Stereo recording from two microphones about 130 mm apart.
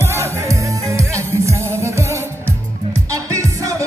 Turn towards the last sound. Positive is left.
turn(degrees=-25)  # may be behind; listen again after turning